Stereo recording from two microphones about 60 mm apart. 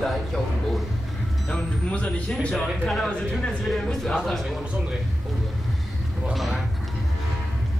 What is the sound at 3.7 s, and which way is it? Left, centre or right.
Music, centre.